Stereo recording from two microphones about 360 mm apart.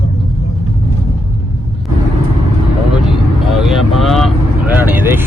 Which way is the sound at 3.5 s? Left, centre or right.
Centre.